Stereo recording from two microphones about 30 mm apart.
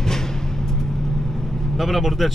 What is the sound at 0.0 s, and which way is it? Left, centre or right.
Vehicle, centre.